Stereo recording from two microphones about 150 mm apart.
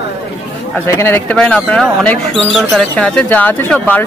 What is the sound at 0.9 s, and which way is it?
Speech, 15° left (ahead or behind).